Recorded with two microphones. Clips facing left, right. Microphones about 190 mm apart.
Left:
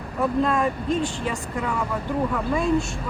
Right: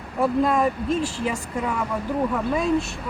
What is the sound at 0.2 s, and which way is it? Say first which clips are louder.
Speech: right 2 dB; 10° right (ahead or behind).